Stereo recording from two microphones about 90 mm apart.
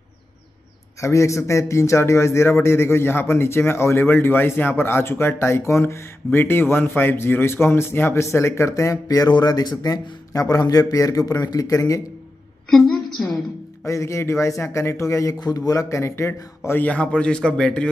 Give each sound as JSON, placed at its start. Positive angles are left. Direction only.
{"t": 1.0, "sound": "a man's voice", "side_deg": 35}
{"t": 12.6, "sound": "a woman's voice", "side_deg": 5}
{"t": 13.8, "sound": "a man's voice", "side_deg": 35}
{"t": 16.8, "sound": "a man's voice", "side_deg": 15}